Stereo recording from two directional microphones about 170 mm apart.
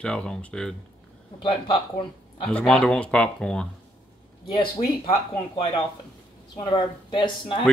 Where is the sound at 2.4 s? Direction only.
5° left (ahead or behind).